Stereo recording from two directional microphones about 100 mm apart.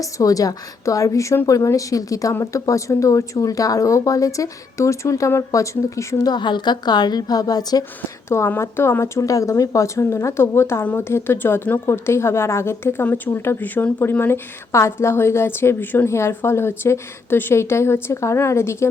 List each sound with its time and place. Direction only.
0.0 s speech: 35° left (ahead or behind)
6.3 s a woman's voice: 50° left (ahead or behind)
8.4 s speech: 25° left (ahead or behind)